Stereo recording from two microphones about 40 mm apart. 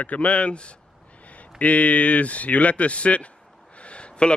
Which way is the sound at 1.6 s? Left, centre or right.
Left.